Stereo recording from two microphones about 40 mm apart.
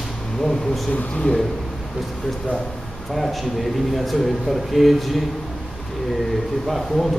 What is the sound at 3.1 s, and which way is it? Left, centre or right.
A man's voice, centre.